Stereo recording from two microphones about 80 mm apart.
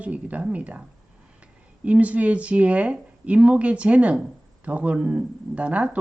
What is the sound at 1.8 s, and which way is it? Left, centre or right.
Speech, centre.